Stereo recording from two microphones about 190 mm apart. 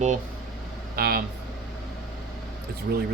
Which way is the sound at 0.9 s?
55° right (ahead or behind).